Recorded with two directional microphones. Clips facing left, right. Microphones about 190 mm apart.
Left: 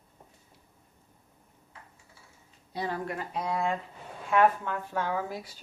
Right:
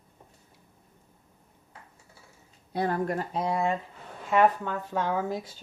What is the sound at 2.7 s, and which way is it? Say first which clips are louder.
Speech: right 5 dB; 50° right (ahead or behind).